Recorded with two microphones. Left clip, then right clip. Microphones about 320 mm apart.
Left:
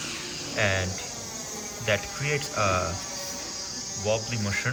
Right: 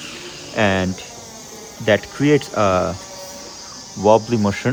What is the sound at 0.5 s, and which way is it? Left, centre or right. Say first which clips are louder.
Speech: right 8 dB; centre.